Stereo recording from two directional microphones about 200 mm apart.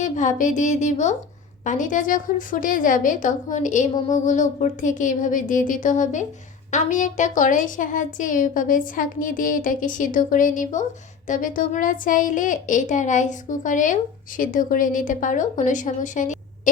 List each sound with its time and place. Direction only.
0.0 s speech: 40° left (ahead or behind)